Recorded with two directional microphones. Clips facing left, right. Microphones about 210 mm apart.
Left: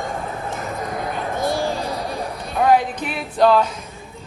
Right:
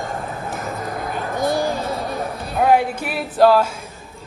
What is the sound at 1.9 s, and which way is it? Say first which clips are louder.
Speech: right 1 dB; centre (ahead or behind).